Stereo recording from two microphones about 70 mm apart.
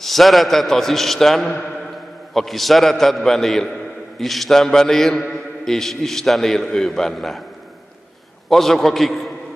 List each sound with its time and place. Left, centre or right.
0.0 s a man's voice: centre
8.5 s a man's voice: centre